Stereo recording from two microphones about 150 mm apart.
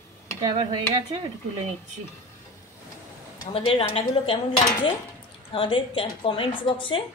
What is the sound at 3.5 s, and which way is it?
Speech, 40° left (ahead or behind).